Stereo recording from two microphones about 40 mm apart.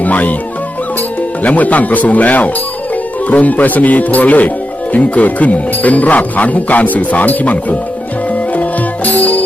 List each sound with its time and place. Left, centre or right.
0.0 s music: left
1.5 s speech: left
9.0 s music: left